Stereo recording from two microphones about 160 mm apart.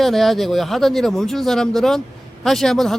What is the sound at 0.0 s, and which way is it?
A man's voice, centre (ahead or behind).